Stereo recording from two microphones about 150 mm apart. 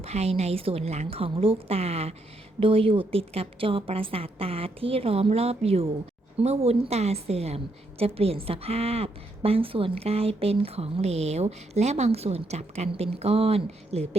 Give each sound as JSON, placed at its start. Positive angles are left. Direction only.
{"t": 0.0, "sound": "a woman's voice", "side_deg": -45}